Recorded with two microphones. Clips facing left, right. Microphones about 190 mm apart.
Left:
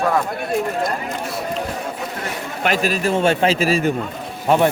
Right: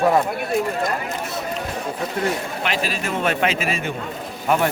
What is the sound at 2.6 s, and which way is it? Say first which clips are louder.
Speech: left 9 dB; 45° left (ahead or behind).